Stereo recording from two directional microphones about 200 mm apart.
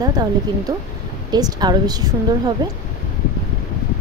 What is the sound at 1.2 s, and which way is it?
Speech, 20° right (ahead or behind).